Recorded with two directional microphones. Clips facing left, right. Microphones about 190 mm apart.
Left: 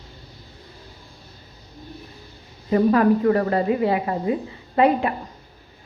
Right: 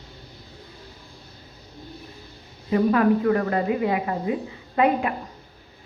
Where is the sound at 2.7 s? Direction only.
35° left (ahead or behind).